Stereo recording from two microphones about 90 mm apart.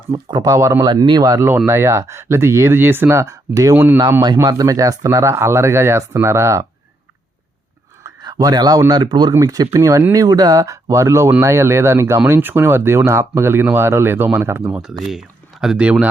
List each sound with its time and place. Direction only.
0.1 s speech: 30° right (ahead or behind)
0.9 s speech: 55° right (ahead or behind)
1.5 s speech: 30° right (ahead or behind)
8.2 s speech: 45° right (ahead or behind)
8.9 s speech: 60° right (ahead or behind)
9.5 s speech: 40° right (ahead or behind)
14.7 s speech: 5° right (ahead or behind)